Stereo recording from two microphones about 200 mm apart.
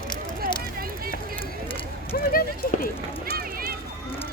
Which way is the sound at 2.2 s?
45° left (ahead or behind).